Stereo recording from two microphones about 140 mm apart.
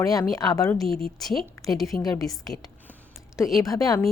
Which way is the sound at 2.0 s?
25° left (ahead or behind).